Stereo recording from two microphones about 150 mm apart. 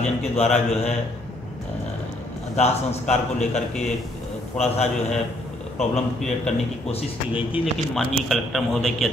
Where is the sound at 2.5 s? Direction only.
45° left (ahead or behind).